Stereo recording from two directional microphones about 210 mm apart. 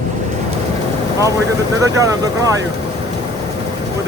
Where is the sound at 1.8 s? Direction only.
15° right (ahead or behind).